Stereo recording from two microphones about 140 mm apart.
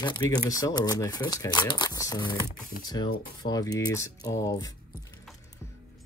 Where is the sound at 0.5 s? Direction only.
25° left (ahead or behind).